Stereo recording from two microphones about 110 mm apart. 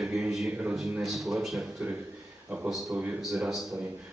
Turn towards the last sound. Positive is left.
turn(degrees=0)  # may be behind; listen again after turning